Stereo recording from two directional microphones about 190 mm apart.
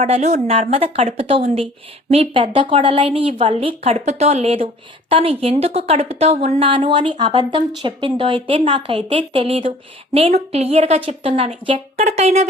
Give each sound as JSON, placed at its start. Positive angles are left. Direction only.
{"t": 0.0, "sound": "a woman's voice", "side_deg": -35}